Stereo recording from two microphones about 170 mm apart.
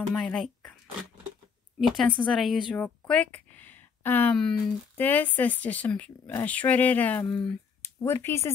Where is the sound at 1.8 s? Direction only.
Centre (ahead or behind).